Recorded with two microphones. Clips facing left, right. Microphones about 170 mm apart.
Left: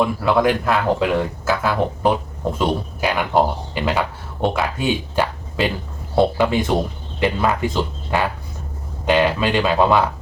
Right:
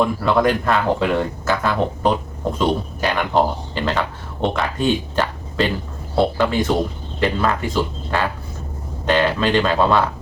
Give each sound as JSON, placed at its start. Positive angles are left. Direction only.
{"t": 0.0, "sound": "a man's voice", "side_deg": 5}